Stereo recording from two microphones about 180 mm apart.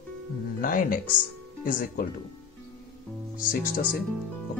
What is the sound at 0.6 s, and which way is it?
Speech, 50° left (ahead or behind).